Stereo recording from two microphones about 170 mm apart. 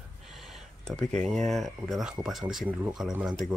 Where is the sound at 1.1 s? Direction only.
45° right (ahead or behind).